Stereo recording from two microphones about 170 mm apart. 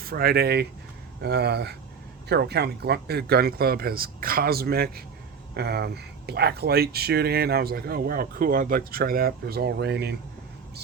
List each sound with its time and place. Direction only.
0.0 s speech: 60° right (ahead or behind)